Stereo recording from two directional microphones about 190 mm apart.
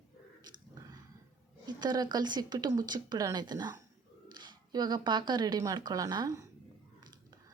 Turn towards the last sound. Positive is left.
turn(degrees=-20)  # may be behind; listen again after turning